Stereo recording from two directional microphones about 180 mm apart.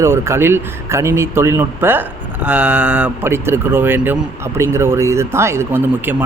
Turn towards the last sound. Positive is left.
turn(degrees=-10)  # may be behind; listen again after turning